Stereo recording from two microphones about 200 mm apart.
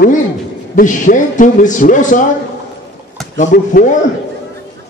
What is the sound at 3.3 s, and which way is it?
Speech, 40° left (ahead or behind).